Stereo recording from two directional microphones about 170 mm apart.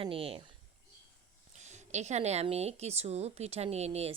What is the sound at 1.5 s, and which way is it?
Speech, 45° right (ahead or behind).